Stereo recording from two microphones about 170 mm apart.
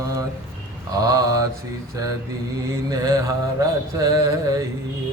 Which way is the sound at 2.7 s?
20° right (ahead or behind).